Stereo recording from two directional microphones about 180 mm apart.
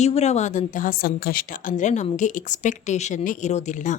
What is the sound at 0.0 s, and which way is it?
A woman's voice, 40° left (ahead or behind).